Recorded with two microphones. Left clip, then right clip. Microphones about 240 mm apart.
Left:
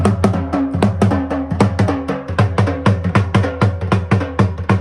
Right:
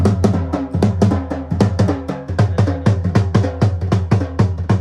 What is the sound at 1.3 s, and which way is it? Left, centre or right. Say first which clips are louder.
Music: left 3 dB; left.